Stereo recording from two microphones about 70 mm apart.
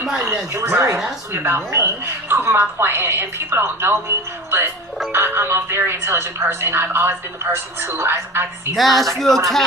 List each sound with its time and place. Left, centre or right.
0.3 s speech: right
8.7 s speech: centre